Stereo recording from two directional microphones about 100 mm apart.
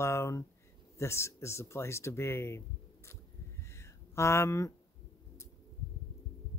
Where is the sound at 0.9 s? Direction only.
25° left (ahead or behind).